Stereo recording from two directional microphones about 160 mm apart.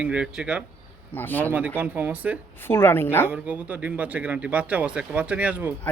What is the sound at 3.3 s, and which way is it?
Speech, 10° right (ahead or behind).